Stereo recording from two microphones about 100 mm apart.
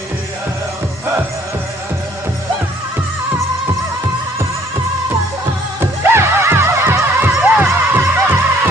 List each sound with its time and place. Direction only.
5.8 s music: 25° right (ahead or behind)